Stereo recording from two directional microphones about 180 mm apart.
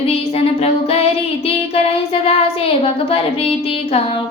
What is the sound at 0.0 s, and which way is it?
Female singing, 35° left (ahead or behind).